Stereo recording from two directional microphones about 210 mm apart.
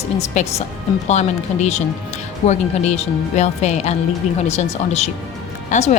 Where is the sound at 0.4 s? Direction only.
35° left (ahead or behind).